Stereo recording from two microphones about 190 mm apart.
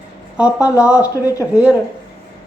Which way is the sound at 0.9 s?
15° left (ahead or behind).